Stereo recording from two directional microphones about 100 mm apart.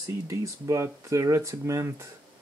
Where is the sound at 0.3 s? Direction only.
30° right (ahead or behind).